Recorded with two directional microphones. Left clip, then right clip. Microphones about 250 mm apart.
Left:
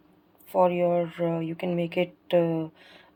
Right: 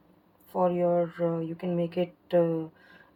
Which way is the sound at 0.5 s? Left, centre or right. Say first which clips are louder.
Left 3 dB; left.